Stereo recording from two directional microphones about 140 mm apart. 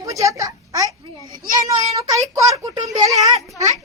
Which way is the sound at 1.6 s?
25° right (ahead or behind).